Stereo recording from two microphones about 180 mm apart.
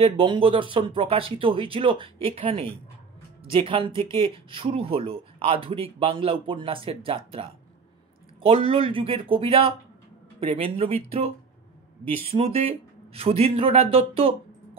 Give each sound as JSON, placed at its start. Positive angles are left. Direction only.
{"t": 0.0, "sound": "speech", "side_deg": -30}